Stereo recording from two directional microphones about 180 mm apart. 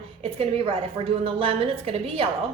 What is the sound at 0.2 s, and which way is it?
A woman's voice, 35° right (ahead or behind).